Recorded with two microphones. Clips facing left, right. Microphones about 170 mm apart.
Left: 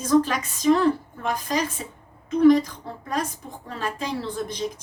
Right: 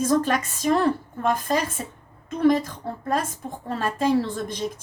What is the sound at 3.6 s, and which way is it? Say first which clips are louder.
Speech: right 7 dB; 50° right (ahead or behind).